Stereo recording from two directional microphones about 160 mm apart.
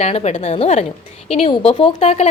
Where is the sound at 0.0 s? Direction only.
40° left (ahead or behind).